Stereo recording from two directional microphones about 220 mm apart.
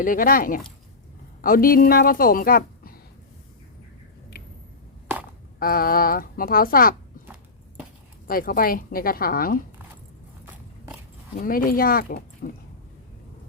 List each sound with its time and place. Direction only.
0.0 s a woman's voice: 40° left (ahead or behind)
5.5 s a woman's voice: 40° left (ahead or behind)
8.3 s a woman's voice: 40° left (ahead or behind)
11.4 s a woman's voice: 40° left (ahead or behind)